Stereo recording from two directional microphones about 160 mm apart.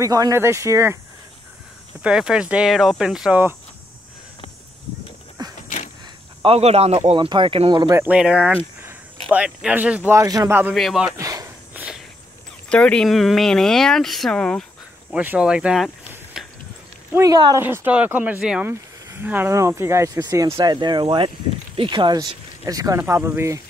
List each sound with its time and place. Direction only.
0.0 s speech: 20° right (ahead or behind)
2.0 s speech: 5° right (ahead or behind)
5.4 s vehicle: 25° right (ahead or behind)
6.4 s speech: 40° right (ahead or behind)
7.1 s speech: 30° right (ahead or behind)
8.0 s a man's voice: 5° right (ahead or behind); by 10.6 s 25° right (ahead or behind)
10.7 s speech: centre (ahead or behind)
11.1 s a sound: 20° right (ahead or behind)
12.6 s speech: 5° left (ahead or behind)
15.1 s speech: 5° right (ahead or behind)
17.1 s speech: 20° right (ahead or behind)
17.6 s speech: 15° right (ahead or behind)